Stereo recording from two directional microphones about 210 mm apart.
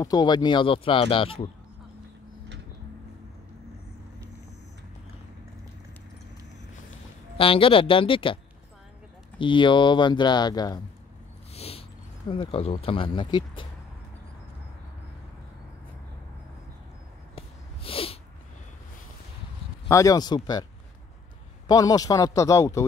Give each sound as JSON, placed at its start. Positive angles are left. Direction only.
{"t": 0.0, "sound": "speech", "side_deg": 20}
{"t": 7.3, "sound": "speech", "side_deg": 25}
{"t": 9.4, "sound": "speech", "side_deg": 25}
{"t": 11.5, "sound": "a sound", "side_deg": 30}
{"t": 12.3, "sound": "speech", "side_deg": 25}
{"t": 17.4, "sound": "snort", "side_deg": 25}
{"t": 19.9, "sound": "speech", "side_deg": 15}
{"t": 21.6, "sound": "speech", "side_deg": 15}